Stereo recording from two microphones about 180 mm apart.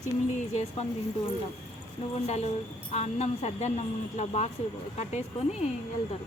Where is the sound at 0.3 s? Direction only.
40° left (ahead or behind).